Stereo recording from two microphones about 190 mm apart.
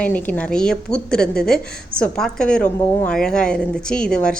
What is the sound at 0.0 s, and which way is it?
A woman's voice, 10° left (ahead or behind).